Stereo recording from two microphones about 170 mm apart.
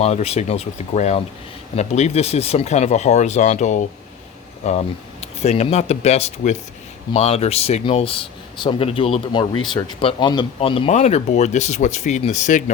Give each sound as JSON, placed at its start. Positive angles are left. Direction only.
{"t": 0.0, "sound": "speech", "side_deg": 40}